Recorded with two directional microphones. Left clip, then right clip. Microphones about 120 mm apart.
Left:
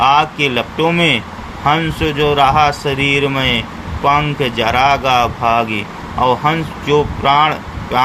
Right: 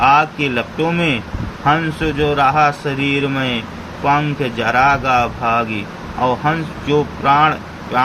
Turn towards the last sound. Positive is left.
turn(degrees=50)  # may be behind; listen again after turning